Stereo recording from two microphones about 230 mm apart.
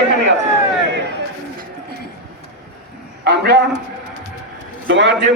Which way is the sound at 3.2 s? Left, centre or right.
Right.